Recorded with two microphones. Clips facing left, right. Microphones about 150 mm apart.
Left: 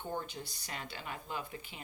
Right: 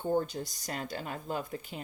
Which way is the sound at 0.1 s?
40° right (ahead or behind).